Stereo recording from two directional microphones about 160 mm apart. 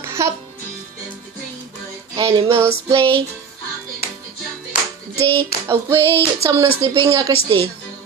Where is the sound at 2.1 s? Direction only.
30° right (ahead or behind).